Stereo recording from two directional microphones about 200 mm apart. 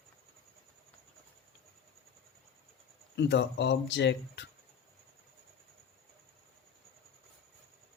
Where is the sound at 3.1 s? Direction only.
60° left (ahead or behind).